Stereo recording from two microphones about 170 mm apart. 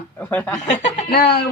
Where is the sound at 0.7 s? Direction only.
45° left (ahead or behind).